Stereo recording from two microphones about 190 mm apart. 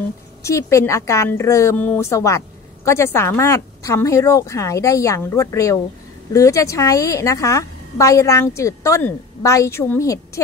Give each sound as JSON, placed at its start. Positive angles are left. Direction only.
{"t": 0.4, "sound": "a woman's voice", "side_deg": 15}